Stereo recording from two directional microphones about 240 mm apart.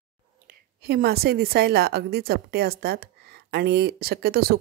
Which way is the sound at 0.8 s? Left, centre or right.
Right.